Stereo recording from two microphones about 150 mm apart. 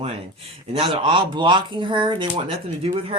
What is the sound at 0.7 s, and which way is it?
Speech, 35° right (ahead or behind).